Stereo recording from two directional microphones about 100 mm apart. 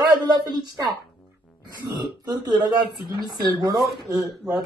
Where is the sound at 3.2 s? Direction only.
40° right (ahead or behind).